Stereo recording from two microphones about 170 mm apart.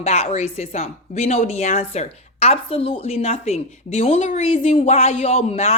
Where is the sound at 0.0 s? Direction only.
40° left (ahead or behind).